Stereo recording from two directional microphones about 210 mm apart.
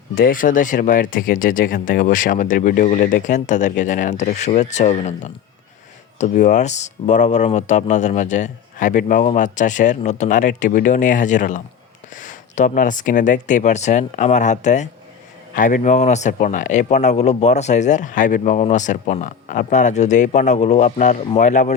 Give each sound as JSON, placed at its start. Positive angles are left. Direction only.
{"t": 0.2, "sound": "speech", "side_deg": 40}